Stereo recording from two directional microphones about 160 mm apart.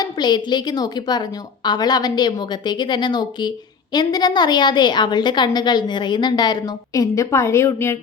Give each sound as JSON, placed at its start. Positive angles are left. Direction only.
{"t": 0.0, "sound": "a woman's voice", "side_deg": 25}